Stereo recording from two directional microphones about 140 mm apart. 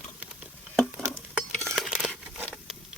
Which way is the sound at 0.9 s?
10° right (ahead or behind).